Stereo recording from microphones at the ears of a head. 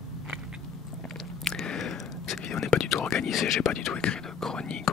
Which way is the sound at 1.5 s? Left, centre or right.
Left.